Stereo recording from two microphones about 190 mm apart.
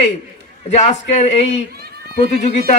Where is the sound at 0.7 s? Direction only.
35° left (ahead or behind).